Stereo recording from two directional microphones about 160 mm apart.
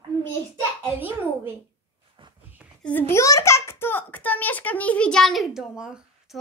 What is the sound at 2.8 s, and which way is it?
A child's voice, 15° left (ahead or behind).